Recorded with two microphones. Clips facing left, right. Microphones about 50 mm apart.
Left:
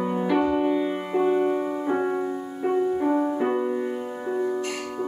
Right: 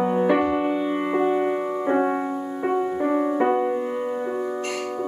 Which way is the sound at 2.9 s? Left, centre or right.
Right.